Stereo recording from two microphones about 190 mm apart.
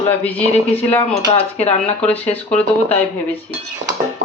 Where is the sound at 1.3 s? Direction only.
35° left (ahead or behind).